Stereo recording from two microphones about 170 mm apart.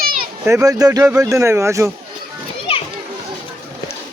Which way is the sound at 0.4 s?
20° right (ahead or behind).